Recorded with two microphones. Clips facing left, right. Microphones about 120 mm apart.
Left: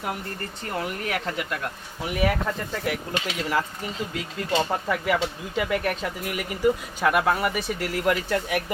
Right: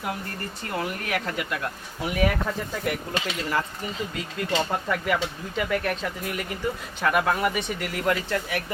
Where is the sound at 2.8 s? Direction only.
5° left (ahead or behind).